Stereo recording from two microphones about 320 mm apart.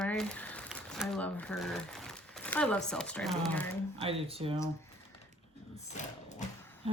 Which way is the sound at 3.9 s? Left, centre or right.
Centre.